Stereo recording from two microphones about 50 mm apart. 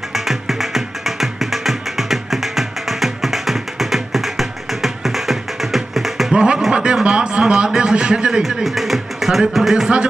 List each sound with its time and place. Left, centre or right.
0.1 s music: centre
6.3 s a sound: right
8.4 s speech: centre